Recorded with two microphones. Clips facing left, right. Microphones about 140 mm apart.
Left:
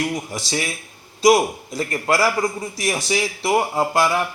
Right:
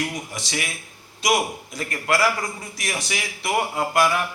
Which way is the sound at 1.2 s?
30° left (ahead or behind).